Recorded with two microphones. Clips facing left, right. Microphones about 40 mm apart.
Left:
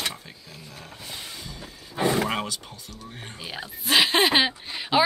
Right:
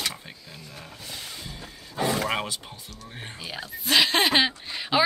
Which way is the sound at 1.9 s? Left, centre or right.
Centre.